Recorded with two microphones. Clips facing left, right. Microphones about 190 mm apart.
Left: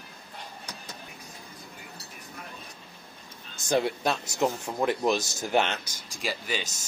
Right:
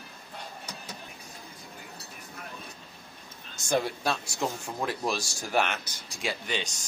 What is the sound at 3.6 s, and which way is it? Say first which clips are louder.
Speech: left 2 dB; 20° left (ahead or behind).